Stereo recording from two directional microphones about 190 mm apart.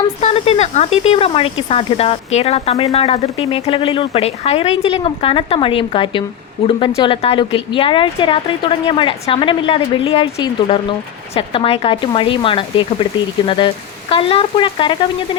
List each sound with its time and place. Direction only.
0.2 s a woman's voice: 35° left (ahead or behind)
14.1 s a woman's voice: 30° left (ahead or behind)